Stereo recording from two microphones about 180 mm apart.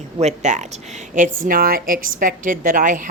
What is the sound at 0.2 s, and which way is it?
Speech, 40° right (ahead or behind).